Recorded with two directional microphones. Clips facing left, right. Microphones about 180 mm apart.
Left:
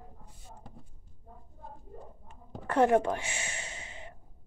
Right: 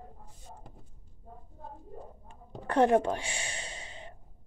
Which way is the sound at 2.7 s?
20° right (ahead or behind).